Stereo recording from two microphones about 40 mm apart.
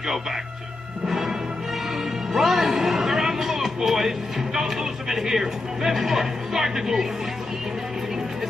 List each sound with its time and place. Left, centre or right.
1.0 s music: centre
2.3 s a sound: centre
4.6 s speech: centre